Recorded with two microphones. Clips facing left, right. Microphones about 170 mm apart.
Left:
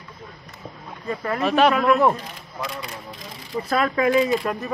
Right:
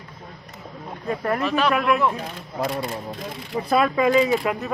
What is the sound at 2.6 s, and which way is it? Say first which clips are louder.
Speech: right 6 dB; 50° right (ahead or behind).